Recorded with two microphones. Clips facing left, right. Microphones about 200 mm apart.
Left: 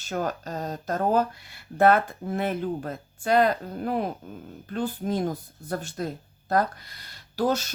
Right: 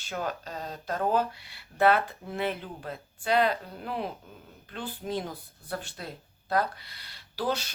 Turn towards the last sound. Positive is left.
turn(degrees=45)  # may be behind; listen again after turning